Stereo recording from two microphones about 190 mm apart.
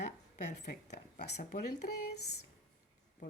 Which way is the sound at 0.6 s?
60° left (ahead or behind).